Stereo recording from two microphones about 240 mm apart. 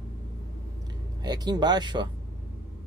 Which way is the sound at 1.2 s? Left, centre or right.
Centre.